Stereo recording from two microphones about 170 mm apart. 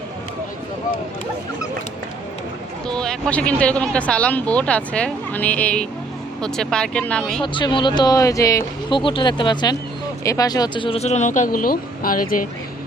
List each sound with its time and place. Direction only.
2.8 s speech: 5° left (ahead or behind)
7.4 s speech: 30° left (ahead or behind)
9.0 s speech: 30° left (ahead or behind); by 12.5 s 55° left (ahead or behind)